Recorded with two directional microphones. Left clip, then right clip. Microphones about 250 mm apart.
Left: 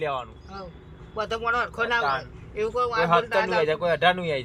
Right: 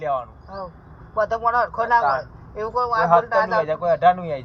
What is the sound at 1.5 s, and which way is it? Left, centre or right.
Speech, centre.